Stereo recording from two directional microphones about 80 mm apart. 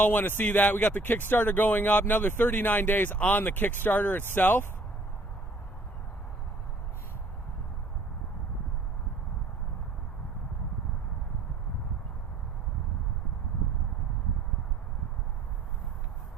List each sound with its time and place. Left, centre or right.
0.0 s speech: left